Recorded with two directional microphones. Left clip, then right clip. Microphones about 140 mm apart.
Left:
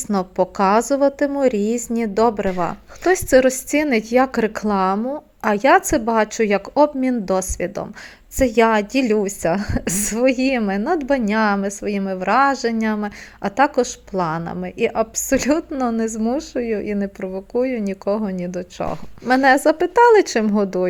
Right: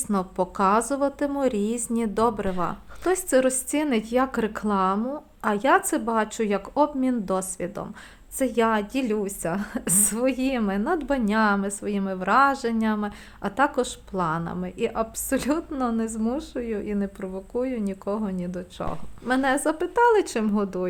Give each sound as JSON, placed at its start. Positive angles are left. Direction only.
{"t": 0.1, "sound": "a woman's voice", "side_deg": 20}
{"t": 19.3, "sound": "a woman's voice", "side_deg": 35}